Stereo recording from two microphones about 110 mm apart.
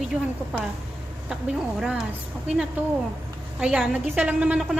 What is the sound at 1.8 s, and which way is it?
Speech, 5° right (ahead or behind).